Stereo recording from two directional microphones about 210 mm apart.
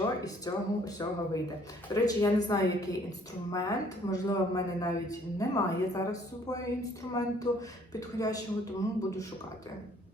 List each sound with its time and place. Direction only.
0.0 s speech: 15° left (ahead or behind)